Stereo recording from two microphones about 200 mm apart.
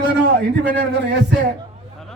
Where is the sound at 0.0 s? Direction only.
60° right (ahead or behind).